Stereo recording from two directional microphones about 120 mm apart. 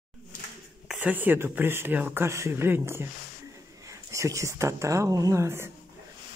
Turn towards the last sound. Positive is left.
turn(degrees=-20)  # may be behind; listen again after turning